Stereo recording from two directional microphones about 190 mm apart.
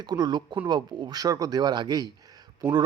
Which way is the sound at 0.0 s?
20° right (ahead or behind).